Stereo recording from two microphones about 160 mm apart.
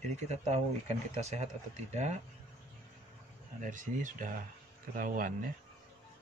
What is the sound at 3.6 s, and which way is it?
Speech, 55° right (ahead or behind).